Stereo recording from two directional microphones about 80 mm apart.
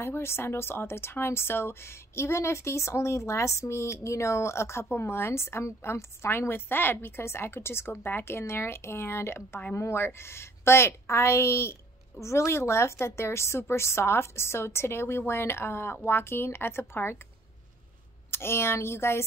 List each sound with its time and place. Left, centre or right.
0.0 s speech: left
18.3 s speech: left